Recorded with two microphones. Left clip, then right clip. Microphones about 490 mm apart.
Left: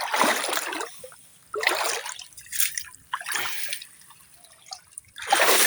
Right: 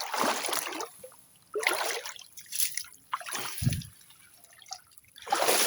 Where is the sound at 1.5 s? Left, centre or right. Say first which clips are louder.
Left 5 dB; right.